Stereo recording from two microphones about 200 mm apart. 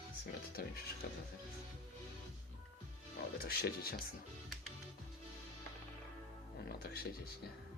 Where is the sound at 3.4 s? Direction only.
50° left (ahead or behind).